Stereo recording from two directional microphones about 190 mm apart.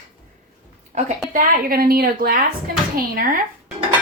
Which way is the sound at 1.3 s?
50° right (ahead or behind).